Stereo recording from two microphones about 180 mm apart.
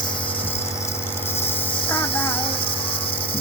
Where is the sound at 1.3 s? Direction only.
10° left (ahead or behind).